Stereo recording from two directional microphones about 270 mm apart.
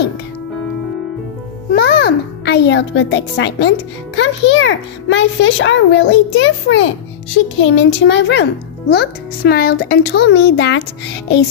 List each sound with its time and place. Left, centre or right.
1.7 s music: left
4.1 s a child's voice: left